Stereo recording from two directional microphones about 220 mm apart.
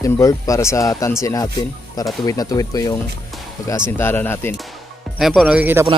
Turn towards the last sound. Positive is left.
turn(degrees=-10)  # may be behind; listen again after turning